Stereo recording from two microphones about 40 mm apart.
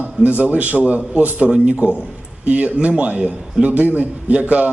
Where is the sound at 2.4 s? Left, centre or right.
Right.